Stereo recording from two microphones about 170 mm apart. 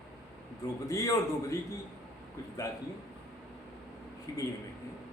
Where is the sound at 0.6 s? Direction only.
20° left (ahead or behind).